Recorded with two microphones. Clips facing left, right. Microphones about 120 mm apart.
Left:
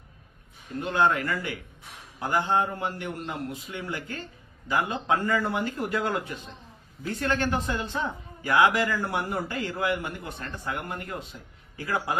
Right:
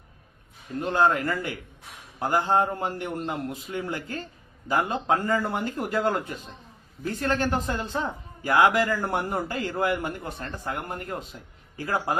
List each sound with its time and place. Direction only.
0.8 s a man's voice: 40° right (ahead or behind)